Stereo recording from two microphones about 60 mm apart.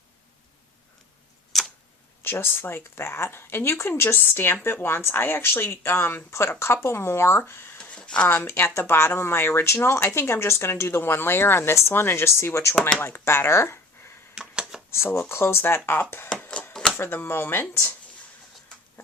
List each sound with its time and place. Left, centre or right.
1.5 s tick-tock: centre
2.2 s speech: left
7.8 s a sound: centre
8.3 s speech: left
13.0 s speech: left
14.3 s a sound: centre
14.8 s speech: left